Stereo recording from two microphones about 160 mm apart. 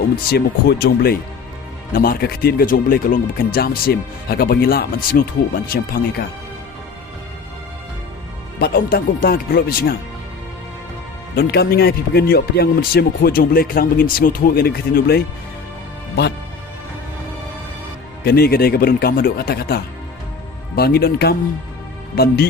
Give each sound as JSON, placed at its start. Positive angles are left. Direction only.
{"t": 0.3, "sound": "speech", "side_deg": 80}
{"t": 8.5, "sound": "speech", "side_deg": 75}
{"t": 11.3, "sound": "speech", "side_deg": 80}
{"t": 18.2, "sound": "speech", "side_deg": 80}